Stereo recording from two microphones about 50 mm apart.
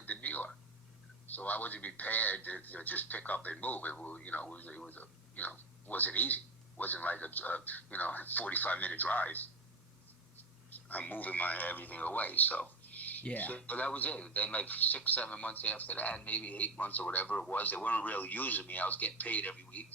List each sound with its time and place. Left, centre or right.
0.0 s a sound: left
1.3 s speech: left
10.7 s a man's voice: left